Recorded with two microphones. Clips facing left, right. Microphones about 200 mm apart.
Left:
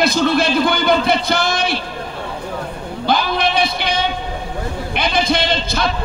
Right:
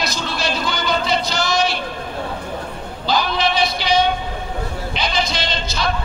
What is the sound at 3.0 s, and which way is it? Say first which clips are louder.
A man's voice: left 2 dB; 55° left (ahead or behind).